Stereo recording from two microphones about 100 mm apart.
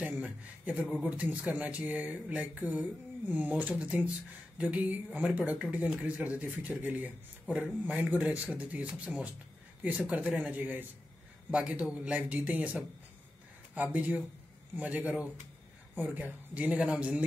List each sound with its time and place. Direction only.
0.0 s speech: 15° right (ahead or behind)